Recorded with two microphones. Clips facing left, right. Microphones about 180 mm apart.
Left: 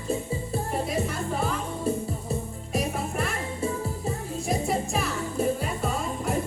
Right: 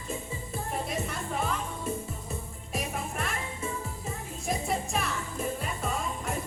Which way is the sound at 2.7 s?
Centre (ahead or behind).